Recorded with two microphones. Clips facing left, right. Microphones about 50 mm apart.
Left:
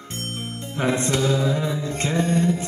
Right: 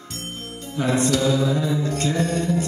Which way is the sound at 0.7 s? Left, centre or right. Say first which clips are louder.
Right 2 dB; left.